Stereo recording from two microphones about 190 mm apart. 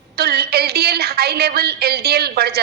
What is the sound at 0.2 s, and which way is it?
A woman's voice, 55° right (ahead or behind).